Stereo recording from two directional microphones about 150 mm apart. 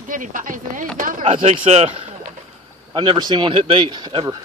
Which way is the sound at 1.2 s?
45° right (ahead or behind).